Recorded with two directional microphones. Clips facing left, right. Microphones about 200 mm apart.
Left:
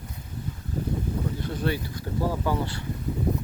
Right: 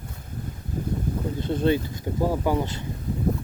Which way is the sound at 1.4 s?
25° right (ahead or behind).